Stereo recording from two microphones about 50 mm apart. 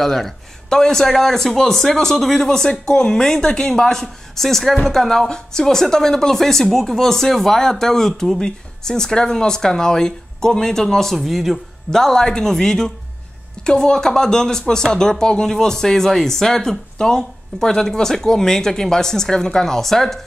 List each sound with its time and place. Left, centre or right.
0.0 s speech: centre